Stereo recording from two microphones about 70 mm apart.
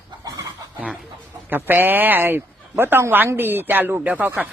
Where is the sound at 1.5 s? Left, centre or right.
Right.